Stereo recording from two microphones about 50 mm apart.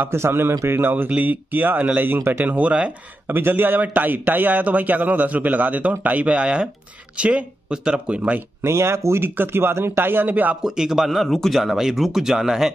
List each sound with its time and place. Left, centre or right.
0.0 s a man's voice: right
3.3 s a man's voice: right
8.6 s speech: right
9.4 s speech: right
10.6 s speech: centre